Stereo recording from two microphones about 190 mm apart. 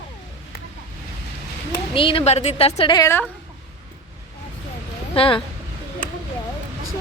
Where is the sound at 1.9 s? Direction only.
30° left (ahead or behind).